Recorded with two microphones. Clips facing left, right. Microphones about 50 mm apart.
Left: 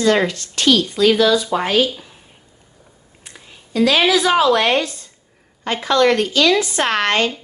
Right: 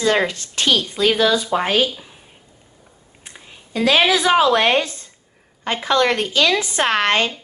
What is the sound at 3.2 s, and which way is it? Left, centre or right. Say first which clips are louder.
A woman's voice: even; right.